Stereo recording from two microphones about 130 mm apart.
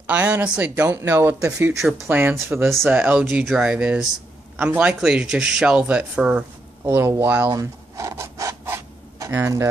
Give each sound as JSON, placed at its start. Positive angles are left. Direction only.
{"t": 0.0, "sound": "speech", "side_deg": -10}
{"t": 6.8, "sound": "speech", "side_deg": -20}
{"t": 7.5, "sound": "filing", "side_deg": -25}